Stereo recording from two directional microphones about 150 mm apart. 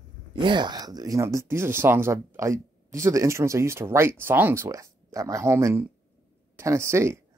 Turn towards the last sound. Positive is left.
turn(degrees=-20)  # may be behind; listen again after turning